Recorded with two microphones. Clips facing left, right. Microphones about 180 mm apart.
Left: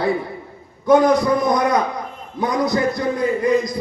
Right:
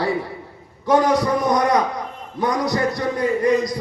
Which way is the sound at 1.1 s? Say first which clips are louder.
Left 2 dB; 80° right.